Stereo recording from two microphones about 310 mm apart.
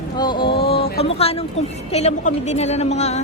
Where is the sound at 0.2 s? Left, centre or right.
Centre.